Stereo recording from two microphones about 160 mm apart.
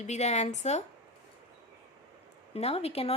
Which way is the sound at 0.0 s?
45° left (ahead or behind).